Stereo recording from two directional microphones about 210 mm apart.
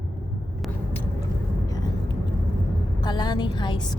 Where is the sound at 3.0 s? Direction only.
20° left (ahead or behind).